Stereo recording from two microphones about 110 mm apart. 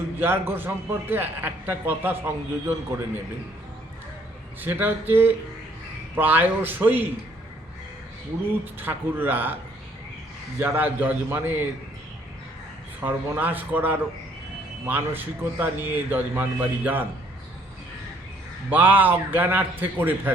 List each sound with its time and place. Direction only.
0.2 s a man's voice: 20° right (ahead or behind)
4.6 s speech: 15° right (ahead or behind)
8.8 s speech: 20° right (ahead or behind)
10.6 s speech: 15° right (ahead or behind)
13.0 s speech: 15° right (ahead or behind)
18.7 s speech: 15° right (ahead or behind)